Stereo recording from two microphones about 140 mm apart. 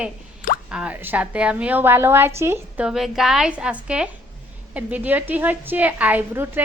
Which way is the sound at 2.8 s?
Centre (ahead or behind).